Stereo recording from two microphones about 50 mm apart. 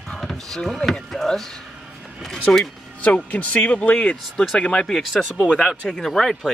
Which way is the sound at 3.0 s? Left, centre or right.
Left.